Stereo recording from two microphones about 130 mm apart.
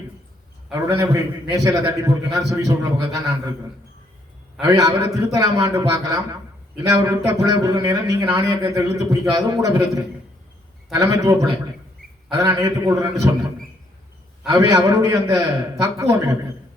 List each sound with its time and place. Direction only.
0.7 s a man's voice: 20° right (ahead or behind)
4.6 s a man's voice: 25° right (ahead or behind)
14.4 s a man's voice: 25° right (ahead or behind)